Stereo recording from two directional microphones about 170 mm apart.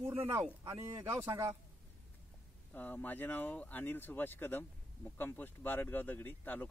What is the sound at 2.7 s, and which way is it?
Speech, 10° left (ahead or behind).